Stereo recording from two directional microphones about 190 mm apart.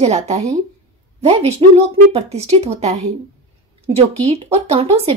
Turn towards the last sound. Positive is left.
turn(degrees=-30)  # may be behind; listen again after turning